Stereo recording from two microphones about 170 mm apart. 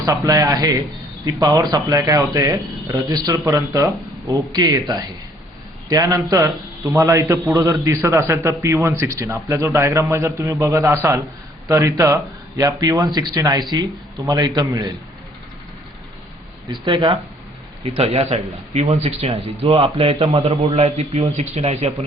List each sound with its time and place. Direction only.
0.0 s a man's voice: 20° right (ahead or behind)
16.8 s speech: 30° right (ahead or behind)